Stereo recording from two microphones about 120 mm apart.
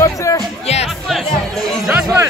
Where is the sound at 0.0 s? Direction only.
25° left (ahead or behind).